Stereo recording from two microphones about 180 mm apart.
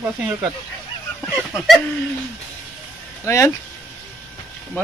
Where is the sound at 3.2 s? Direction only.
15° left (ahead or behind).